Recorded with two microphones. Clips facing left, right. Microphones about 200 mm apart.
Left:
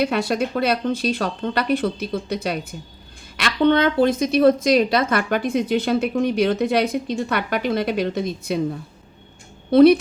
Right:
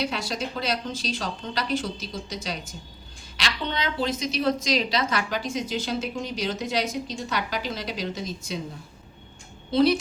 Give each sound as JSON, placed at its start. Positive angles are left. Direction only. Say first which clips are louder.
{"t": 0.0, "sound": "a woman's voice", "louder": "left 8 dB", "side_deg": 60}
{"t": 9.6, "sound": "speech", "louder": "left 9 dB", "side_deg": 60}